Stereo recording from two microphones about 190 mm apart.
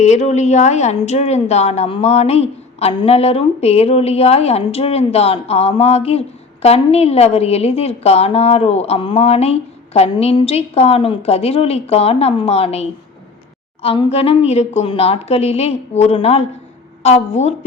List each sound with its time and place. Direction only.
0.0 s speech: 35° left (ahead or behind)